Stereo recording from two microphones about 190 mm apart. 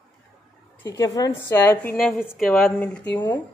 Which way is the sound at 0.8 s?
20° left (ahead or behind).